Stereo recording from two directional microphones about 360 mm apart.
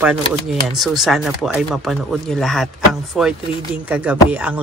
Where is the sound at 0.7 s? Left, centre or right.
Centre.